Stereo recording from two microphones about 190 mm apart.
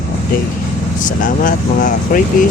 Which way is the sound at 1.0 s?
45° left (ahead or behind).